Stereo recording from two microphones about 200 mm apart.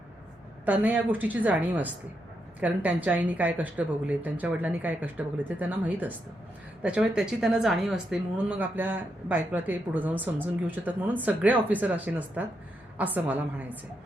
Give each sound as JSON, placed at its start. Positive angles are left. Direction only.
{"t": 0.6, "sound": "speech", "side_deg": -10}